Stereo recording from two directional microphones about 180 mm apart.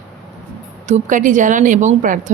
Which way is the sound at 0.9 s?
45° right (ahead or behind).